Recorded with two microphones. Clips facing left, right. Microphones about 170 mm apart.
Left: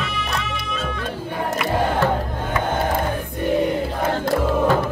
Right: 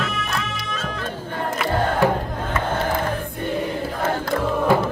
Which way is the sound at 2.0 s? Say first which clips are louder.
Right 4 dB; 10° right (ahead or behind).